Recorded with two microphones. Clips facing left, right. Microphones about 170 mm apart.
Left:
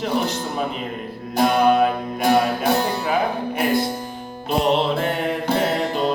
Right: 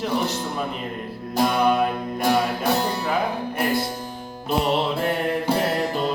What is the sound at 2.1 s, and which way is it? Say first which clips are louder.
Music: left 3 dB; 15° left (ahead or behind).